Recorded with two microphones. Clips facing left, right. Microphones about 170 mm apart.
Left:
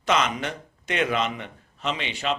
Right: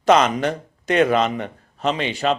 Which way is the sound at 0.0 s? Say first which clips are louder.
Right 8 dB; 40° right (ahead or behind).